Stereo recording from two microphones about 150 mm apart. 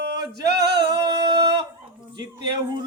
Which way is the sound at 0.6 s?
30° right (ahead or behind).